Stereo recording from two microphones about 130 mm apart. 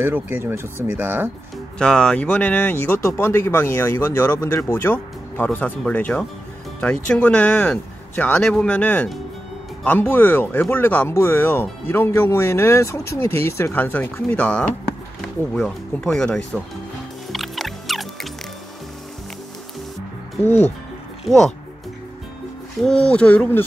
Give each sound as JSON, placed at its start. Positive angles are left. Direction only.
{"t": 0.0, "sound": "speech", "side_deg": -15}
{"t": 1.8, "sound": "speech", "side_deg": 5}
{"t": 17.3, "sound": "music", "side_deg": 0}
{"t": 20.4, "sound": "speech", "side_deg": 15}
{"t": 21.2, "sound": "speech", "side_deg": 0}
{"t": 22.8, "sound": "speech", "side_deg": 5}